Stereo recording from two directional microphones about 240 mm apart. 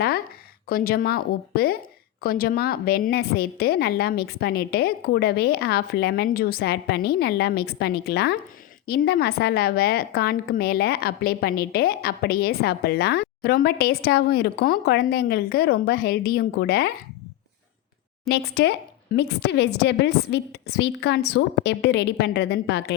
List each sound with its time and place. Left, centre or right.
0.7 s a woman's voice: left
18.3 s a woman's voice: left